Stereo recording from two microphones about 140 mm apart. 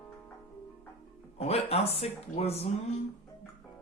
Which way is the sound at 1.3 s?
45° left (ahead or behind).